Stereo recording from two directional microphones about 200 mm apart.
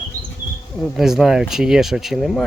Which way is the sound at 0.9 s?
Centre (ahead or behind).